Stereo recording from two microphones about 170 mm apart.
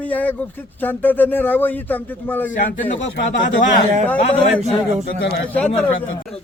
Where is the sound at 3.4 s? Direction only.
50° left (ahead or behind).